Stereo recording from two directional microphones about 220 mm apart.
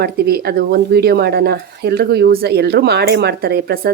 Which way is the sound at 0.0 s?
45° right (ahead or behind).